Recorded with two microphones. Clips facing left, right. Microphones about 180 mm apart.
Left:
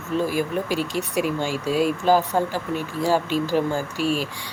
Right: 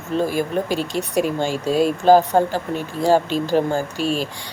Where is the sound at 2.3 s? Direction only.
55° right (ahead or behind).